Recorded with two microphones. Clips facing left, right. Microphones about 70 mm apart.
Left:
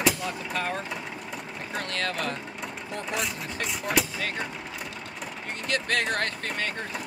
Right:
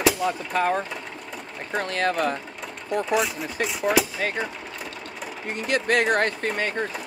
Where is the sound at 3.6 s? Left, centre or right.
Centre.